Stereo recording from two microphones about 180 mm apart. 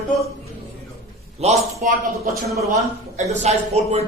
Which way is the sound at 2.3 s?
50° right (ahead or behind).